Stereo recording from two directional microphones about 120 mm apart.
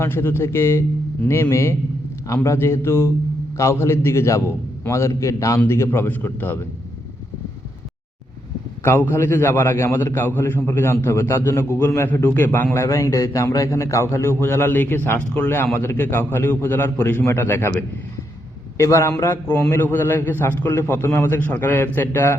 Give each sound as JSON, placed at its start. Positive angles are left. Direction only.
{"t": 0.0, "sound": "a man's voice", "side_deg": 20}
{"t": 8.8, "sound": "a man's voice", "side_deg": 20}